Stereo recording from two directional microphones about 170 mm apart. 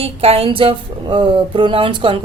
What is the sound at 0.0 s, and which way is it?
Speech, 35° right (ahead or behind).